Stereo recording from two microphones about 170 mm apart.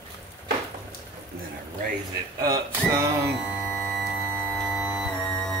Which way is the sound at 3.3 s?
Centre (ahead or behind).